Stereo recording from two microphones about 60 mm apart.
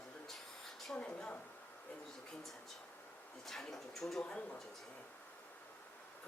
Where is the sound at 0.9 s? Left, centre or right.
Left.